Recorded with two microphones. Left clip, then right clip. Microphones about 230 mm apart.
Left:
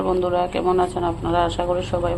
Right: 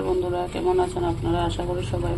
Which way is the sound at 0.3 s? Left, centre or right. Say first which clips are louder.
Left 4 dB; centre.